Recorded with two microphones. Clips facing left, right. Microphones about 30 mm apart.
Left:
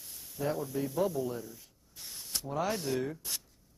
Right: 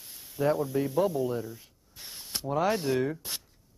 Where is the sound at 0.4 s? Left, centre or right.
Right.